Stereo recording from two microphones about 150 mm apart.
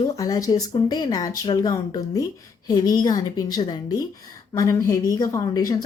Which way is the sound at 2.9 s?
25° left (ahead or behind).